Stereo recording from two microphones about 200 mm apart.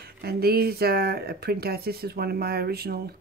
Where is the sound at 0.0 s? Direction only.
50° right (ahead or behind).